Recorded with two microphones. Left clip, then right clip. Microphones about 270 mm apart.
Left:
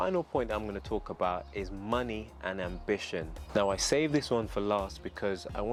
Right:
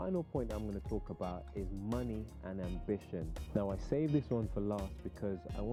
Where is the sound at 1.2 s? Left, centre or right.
Centre.